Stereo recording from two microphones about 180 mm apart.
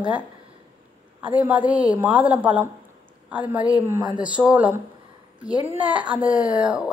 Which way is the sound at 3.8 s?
15° right (ahead or behind).